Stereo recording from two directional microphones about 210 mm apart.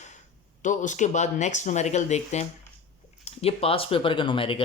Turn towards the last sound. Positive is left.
turn(degrees=25)  # may be behind; listen again after turning